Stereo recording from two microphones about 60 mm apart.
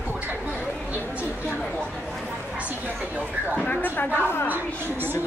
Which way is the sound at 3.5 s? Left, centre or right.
Left.